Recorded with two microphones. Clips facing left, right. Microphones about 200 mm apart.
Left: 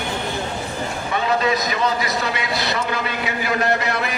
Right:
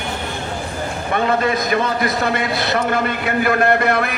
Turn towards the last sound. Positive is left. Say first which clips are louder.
# right 5 dB
turn(degrees=-55)  # may be behind; listen again after turning